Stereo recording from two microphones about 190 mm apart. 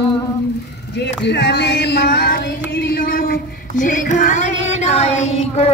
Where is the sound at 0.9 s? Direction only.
65° left (ahead or behind).